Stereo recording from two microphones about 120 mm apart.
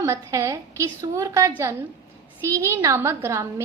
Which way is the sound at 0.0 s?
25° right (ahead or behind).